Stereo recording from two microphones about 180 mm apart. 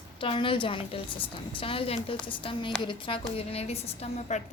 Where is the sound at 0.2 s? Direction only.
30° left (ahead or behind).